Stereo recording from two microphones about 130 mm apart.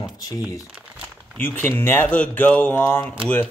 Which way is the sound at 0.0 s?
30° left (ahead or behind).